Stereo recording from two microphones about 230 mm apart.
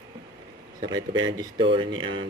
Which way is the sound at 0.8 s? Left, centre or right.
Centre.